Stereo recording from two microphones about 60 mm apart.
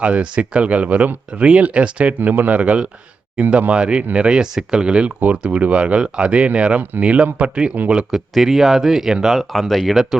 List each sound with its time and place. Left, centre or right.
0.0 s speech: centre
8.1 s speech: centre